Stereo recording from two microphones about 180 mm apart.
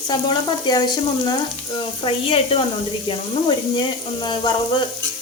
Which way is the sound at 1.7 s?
30° left (ahead or behind).